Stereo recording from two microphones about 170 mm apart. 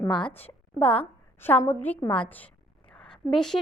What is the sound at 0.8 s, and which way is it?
A woman's voice, 10° left (ahead or behind).